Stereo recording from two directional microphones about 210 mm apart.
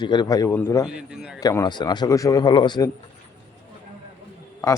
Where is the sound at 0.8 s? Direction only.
5° right (ahead or behind).